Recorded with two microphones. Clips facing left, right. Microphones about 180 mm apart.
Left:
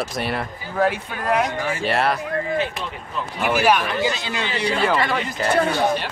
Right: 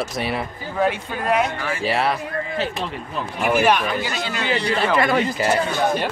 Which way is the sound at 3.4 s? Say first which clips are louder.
Right 1 dB; 5° left (ahead or behind).